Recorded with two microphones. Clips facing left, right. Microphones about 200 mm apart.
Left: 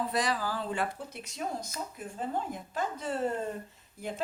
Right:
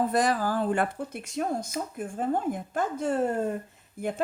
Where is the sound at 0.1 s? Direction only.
50° right (ahead or behind).